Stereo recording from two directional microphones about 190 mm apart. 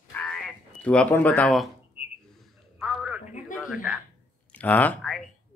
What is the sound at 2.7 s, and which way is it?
Telephone, 5° right (ahead or behind).